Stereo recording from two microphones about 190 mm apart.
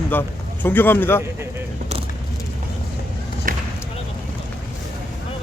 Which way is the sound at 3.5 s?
45° right (ahead or behind).